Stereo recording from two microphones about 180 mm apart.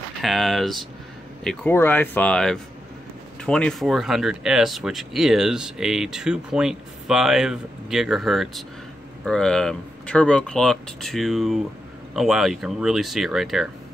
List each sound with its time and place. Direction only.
0.2 s speech: centre (ahead or behind)